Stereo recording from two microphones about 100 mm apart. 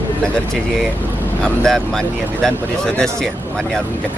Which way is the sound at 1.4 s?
5° left (ahead or behind).